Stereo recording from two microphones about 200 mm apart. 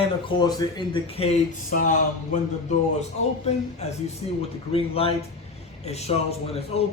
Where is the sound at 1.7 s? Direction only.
40° left (ahead or behind).